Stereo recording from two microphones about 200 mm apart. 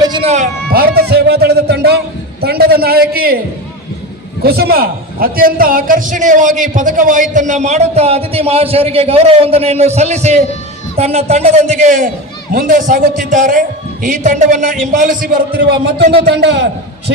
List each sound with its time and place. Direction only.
0.0 s music: 25° right (ahead or behind)
0.7 s speech: 50° right (ahead or behind)
4.4 s a man's voice: 50° right (ahead or behind)
16.1 s a man's voice: 55° right (ahead or behind)